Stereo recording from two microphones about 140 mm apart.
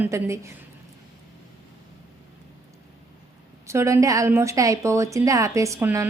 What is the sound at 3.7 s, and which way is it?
A woman's voice, 20° right (ahead or behind).